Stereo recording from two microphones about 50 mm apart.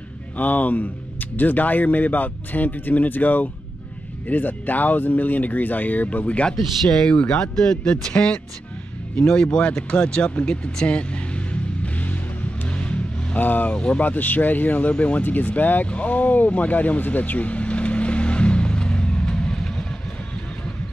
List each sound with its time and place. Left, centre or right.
0.4 s speech: left
12.7 s a sound: left
13.4 s speech: left
13.7 s speech: left
14.0 s speech: left
15.9 s vehicle: left; by 19.9 s centre